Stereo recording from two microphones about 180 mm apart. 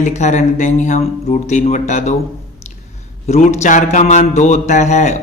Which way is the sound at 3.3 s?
40° left (ahead or behind).